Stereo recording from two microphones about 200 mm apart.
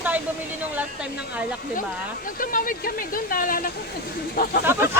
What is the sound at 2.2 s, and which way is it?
Speech, 45° left (ahead or behind).